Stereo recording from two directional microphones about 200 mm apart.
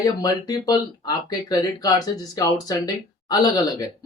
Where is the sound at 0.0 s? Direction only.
20° left (ahead or behind).